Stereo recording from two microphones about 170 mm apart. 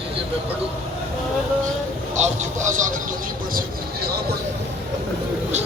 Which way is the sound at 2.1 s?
45° right (ahead or behind).